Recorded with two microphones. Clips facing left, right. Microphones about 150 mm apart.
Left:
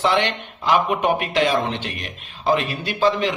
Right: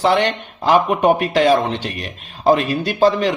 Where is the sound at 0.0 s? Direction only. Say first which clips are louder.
Right 4 dB; 35° right (ahead or behind).